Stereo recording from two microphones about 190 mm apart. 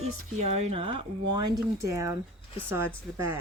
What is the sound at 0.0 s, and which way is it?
Speech, 35° right (ahead or behind).